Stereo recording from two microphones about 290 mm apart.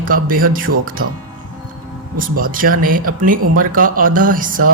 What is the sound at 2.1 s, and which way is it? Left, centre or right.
Speech, right.